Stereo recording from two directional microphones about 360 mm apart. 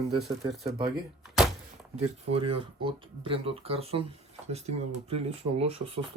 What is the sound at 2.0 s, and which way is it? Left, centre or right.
Speech, centre.